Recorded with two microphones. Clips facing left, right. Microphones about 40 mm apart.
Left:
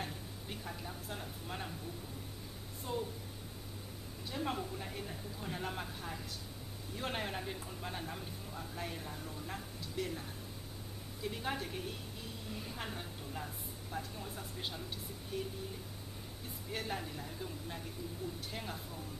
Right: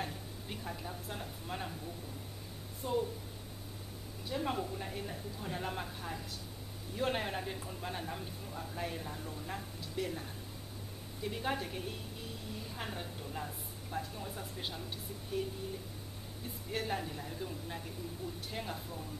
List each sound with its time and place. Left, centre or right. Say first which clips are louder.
0.0 s a sound: right 2 dB; centre
2.8 s speech: right 5 dB; centre
4.3 s speech: right 3 dB; centre
11.2 s speech: right 2 dB; centre
12.7 s a sound: right 2 dB; centre
13.9 s speech: right 3 dB; centre
16.7 s speech: right 3 dB; centre